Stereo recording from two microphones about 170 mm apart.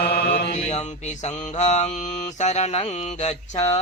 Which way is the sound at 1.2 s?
40° left (ahead or behind).